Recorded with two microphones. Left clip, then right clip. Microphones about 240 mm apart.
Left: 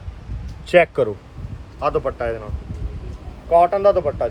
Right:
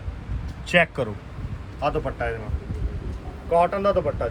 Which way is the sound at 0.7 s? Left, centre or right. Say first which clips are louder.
Left 6 dB; left.